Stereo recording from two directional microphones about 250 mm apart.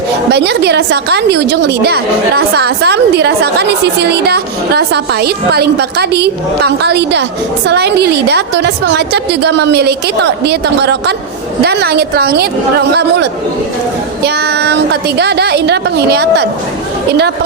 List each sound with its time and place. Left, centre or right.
0.3 s a woman's voice: right
14.5 s a woman's voice: right